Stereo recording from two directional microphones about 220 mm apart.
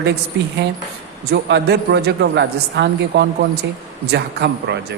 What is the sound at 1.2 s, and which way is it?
A woman's voice, 50° right (ahead or behind).